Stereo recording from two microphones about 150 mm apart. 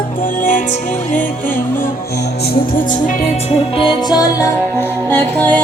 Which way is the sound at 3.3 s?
35° left (ahead or behind).